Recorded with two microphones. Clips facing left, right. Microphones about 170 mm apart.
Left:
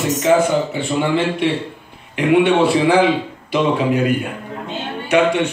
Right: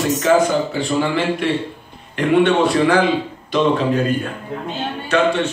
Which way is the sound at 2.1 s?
10° left (ahead or behind).